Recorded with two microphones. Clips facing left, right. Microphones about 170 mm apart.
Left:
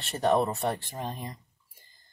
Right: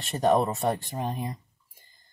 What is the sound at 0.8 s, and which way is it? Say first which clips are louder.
Speech: right 4 dB; 15° right (ahead or behind).